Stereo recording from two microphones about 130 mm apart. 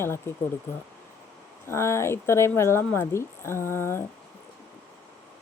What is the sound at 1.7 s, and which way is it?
Speech, 20° left (ahead or behind).